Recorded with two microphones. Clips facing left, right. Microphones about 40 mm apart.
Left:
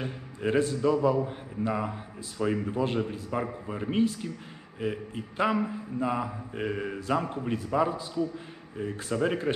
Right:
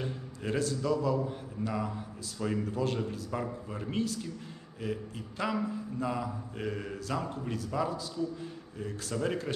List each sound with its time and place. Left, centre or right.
0.0 s a man's voice: left